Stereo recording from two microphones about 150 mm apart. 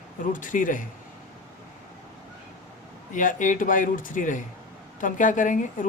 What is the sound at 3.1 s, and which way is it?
Speech, 60° left (ahead or behind).